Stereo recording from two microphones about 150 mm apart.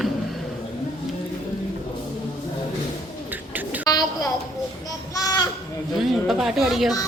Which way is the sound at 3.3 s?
10° right (ahead or behind).